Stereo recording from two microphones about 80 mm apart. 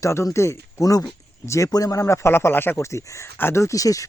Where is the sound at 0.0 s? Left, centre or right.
Left.